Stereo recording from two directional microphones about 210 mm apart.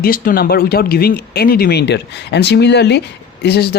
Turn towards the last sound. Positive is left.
turn(degrees=50)  # may be behind; listen again after turning